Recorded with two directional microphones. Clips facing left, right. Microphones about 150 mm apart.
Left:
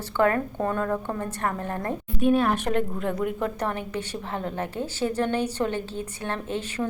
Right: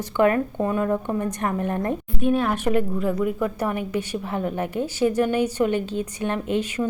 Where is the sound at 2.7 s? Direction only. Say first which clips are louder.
Right 4 dB; 5° right (ahead or behind).